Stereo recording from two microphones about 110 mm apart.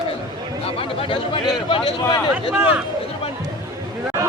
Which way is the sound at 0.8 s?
55° left (ahead or behind).